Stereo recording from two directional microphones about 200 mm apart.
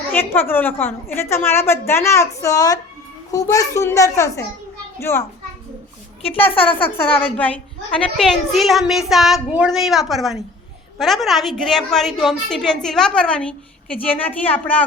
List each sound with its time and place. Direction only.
0.1 s a woman's voice: 10° left (ahead or behind)
6.2 s a woman's voice: 30° left (ahead or behind)
7.2 s a woman's voice: 5° left (ahead or behind)